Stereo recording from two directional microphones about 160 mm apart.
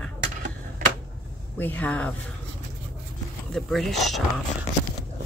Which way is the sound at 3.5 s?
Centre (ahead or behind).